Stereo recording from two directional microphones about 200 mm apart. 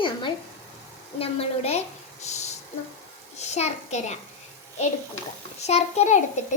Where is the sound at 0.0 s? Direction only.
25° left (ahead or behind).